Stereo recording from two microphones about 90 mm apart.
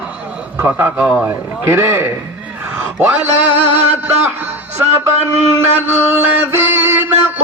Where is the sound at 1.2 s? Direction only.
25° right (ahead or behind).